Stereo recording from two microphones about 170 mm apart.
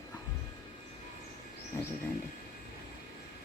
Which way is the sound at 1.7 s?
15° left (ahead or behind).